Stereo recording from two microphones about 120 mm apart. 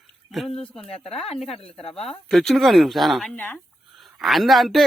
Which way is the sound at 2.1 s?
5° left (ahead or behind).